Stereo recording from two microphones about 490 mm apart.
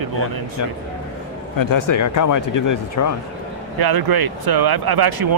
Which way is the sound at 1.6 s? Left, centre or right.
Left.